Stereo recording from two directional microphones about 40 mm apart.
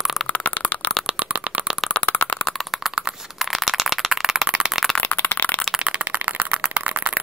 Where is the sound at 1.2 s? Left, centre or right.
Right.